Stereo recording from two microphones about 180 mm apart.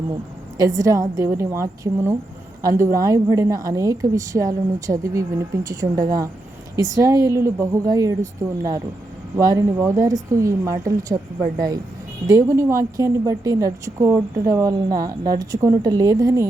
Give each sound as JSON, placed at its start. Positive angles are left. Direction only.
{"t": 0.5, "sound": "a woman's voice", "side_deg": -20}